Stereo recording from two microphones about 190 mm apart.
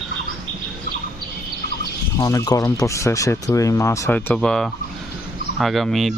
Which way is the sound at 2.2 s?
20° left (ahead or behind).